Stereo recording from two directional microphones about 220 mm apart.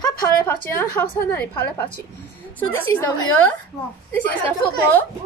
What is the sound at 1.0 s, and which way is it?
Speech, 10° left (ahead or behind).